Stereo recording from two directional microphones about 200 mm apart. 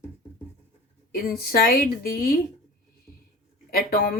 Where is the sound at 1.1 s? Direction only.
50° left (ahead or behind).